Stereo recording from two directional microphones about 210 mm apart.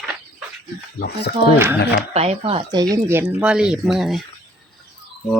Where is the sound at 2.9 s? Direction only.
10° right (ahead or behind).